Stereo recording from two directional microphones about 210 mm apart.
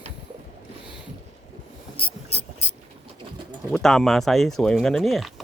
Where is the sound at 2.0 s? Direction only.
25° left (ahead or behind).